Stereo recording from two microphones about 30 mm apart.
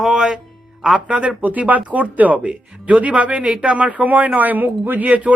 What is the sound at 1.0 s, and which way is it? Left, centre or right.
Speech, right.